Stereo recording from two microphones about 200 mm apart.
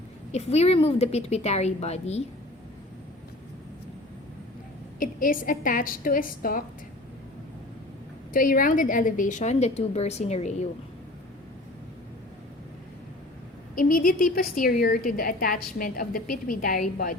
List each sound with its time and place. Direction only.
0.3 s a woman's voice: 30° left (ahead or behind)
4.9 s a woman's voice: 45° left (ahead or behind)
8.3 s a woman's voice: 45° left (ahead or behind)
13.7 s a woman's voice: 45° left (ahead or behind)